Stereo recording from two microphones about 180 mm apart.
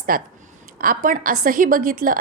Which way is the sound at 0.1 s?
55° right (ahead or behind).